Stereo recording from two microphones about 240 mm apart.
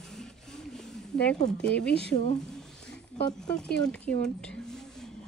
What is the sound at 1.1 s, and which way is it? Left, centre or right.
Speech, centre.